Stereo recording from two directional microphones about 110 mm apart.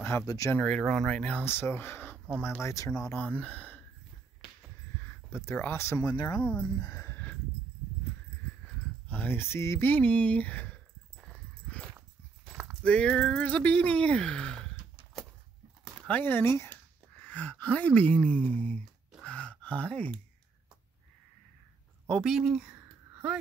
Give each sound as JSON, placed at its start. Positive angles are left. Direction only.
{"t": 0.3, "sound": "speech", "side_deg": 30}
{"t": 0.6, "sound": "speech", "side_deg": 10}
{"t": 3.2, "sound": "speech", "side_deg": 10}
{"t": 5.0, "sound": "speech", "side_deg": 20}
{"t": 6.1, "sound": "speech", "side_deg": 35}
{"t": 6.4, "sound": "speech", "side_deg": 10}
{"t": 6.8, "sound": "speech", "side_deg": 35}
{"t": 7.1, "sound": "a sound", "side_deg": 15}
{"t": 8.6, "sound": "speech", "side_deg": 15}
{"t": 12.8, "sound": "speech", "side_deg": 10}
{"t": 16.1, "sound": "speech", "side_deg": 15}
{"t": 19.2, "sound": "gasp", "side_deg": 10}
{"t": 22.0, "sound": "a sound", "side_deg": 5}
{"t": 22.3, "sound": "speech", "side_deg": -5}